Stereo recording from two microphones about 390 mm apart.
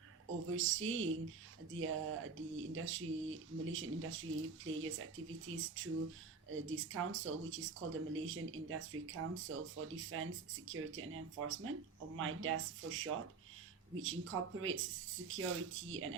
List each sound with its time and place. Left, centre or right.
0.5 s speech: right